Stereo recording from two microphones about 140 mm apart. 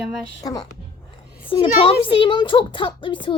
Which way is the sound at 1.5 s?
40° left (ahead or behind).